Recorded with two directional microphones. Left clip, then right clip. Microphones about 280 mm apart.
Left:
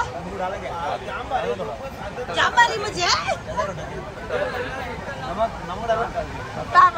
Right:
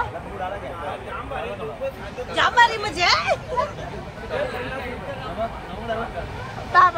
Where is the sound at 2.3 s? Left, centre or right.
Right.